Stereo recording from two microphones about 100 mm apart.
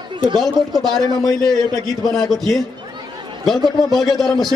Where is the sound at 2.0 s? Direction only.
Centre (ahead or behind).